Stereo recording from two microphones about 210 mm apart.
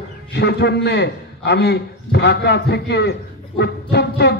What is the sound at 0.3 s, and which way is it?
A man's voice, 50° left (ahead or behind).